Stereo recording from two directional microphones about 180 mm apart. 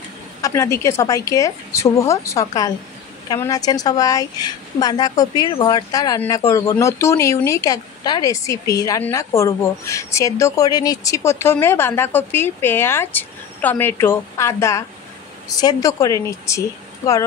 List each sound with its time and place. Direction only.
0.4 s a woman's voice: 15° left (ahead or behind)